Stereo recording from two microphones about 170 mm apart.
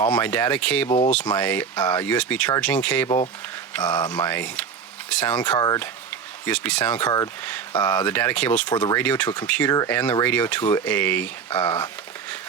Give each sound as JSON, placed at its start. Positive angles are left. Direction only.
{"t": 0.0, "sound": "speech", "side_deg": 10}
{"t": 0.9, "sound": "speech", "side_deg": 35}
{"t": 1.1, "sound": "speech", "side_deg": 10}
{"t": 5.5, "sound": "speech", "side_deg": 20}
{"t": 6.4, "sound": "speech", "side_deg": 10}